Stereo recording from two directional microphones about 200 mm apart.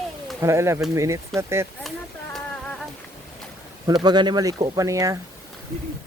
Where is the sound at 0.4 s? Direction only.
15° right (ahead or behind).